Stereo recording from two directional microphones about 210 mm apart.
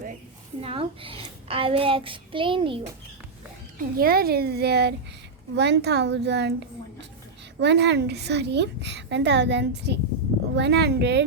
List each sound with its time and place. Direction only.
0.6 s a child's voice: 25° right (ahead or behind)
3.8 s a child's voice: 45° right (ahead or behind)